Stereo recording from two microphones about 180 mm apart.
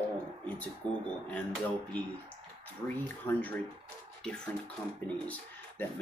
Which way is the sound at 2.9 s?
10° left (ahead or behind).